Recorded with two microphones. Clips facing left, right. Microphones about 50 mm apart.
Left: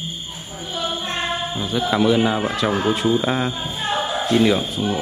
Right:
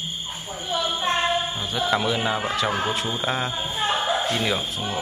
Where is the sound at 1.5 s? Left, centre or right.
Centre.